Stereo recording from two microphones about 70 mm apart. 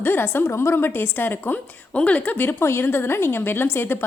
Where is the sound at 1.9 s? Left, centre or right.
Centre.